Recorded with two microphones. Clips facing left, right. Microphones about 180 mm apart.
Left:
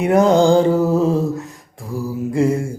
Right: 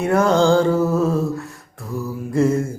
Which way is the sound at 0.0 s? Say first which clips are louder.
Left 3 dB; 15° left (ahead or behind).